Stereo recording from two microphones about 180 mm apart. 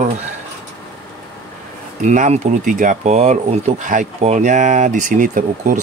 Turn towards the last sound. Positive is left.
turn(degrees=-45)  # may be behind; listen again after turning